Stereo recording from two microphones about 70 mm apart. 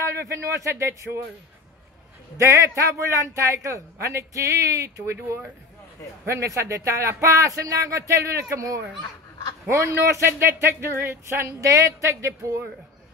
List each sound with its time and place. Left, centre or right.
0.0 s a man's voice: right
2.3 s a man's voice: right